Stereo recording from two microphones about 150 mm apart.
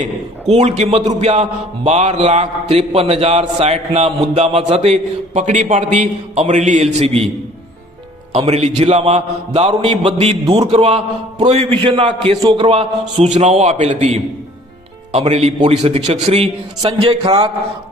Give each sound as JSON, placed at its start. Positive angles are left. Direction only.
{"t": 0.0, "sound": "a man's voice", "side_deg": -50}
{"t": 8.3, "sound": "a man's voice", "side_deg": -45}